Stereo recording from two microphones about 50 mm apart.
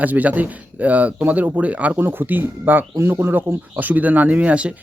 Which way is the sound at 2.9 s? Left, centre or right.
Right.